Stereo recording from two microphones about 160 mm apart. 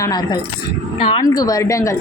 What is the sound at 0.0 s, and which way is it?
A woman's voice, 25° left (ahead or behind).